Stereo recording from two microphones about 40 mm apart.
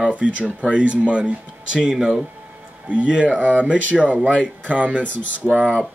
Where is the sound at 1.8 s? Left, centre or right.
Centre; by 5.0 s right.